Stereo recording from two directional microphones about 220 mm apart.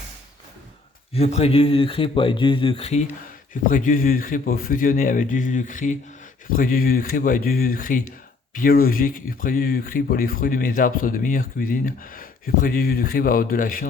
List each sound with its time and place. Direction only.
1.1 s speech: 30° left (ahead or behind)